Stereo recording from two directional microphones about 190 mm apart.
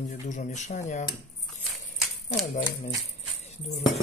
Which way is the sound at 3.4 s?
35° left (ahead or behind).